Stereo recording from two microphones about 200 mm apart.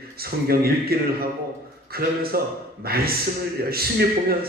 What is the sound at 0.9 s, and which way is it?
A man's voice, 50° right (ahead or behind).